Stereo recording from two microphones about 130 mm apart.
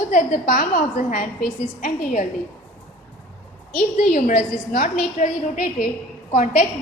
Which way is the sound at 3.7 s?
75° left (ahead or behind).